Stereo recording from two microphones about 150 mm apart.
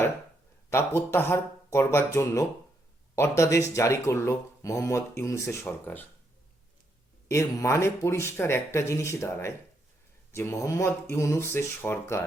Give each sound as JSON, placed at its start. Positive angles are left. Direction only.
{"t": 0.7, "sound": "speech", "side_deg": 15}
{"t": 7.3, "sound": "speech", "side_deg": 20}